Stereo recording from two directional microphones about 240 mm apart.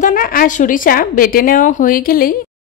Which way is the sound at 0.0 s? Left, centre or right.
Left.